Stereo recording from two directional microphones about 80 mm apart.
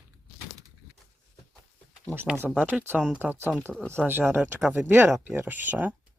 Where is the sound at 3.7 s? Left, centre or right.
Centre.